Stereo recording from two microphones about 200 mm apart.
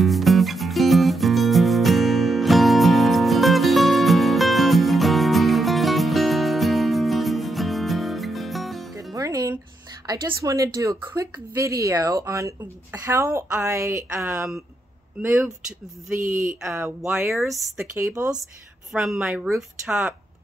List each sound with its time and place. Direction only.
0.0 s music: centre (ahead or behind)
9.1 s music: 15° right (ahead or behind)
10.0 s a woman's voice: 15° right (ahead or behind)
18.4 s a woman's voice: centre (ahead or behind)